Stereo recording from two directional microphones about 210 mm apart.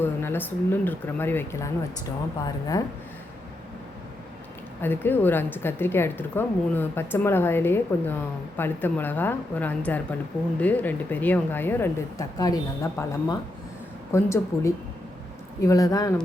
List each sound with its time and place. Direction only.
0.0 s a woman's voice: 10° left (ahead or behind)
4.8 s a woman's voice: 10° left (ahead or behind)